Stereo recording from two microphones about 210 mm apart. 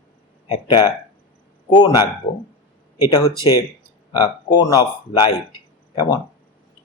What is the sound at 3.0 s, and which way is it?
Speech, 20° left (ahead or behind).